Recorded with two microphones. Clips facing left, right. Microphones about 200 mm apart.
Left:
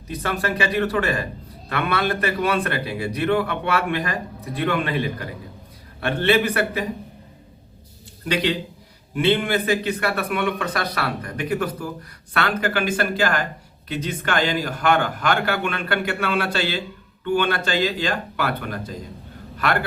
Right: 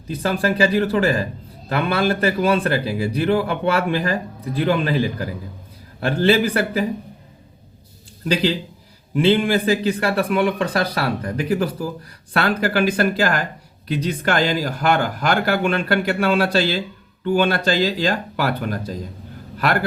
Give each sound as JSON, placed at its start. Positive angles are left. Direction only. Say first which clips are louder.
{"t": 0.2, "sound": "speech", "louder": "right 6 dB", "side_deg": -30}
{"t": 8.3, "sound": "speech", "louder": "right 3 dB", "side_deg": -30}